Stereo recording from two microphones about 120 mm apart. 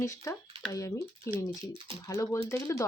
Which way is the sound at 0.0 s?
25° left (ahead or behind).